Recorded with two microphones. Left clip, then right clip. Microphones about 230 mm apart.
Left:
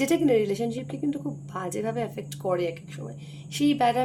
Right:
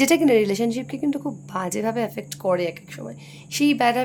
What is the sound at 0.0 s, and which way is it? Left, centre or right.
Speech, right.